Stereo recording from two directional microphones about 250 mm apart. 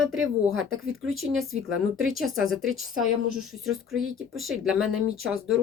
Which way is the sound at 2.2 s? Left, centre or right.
Centre.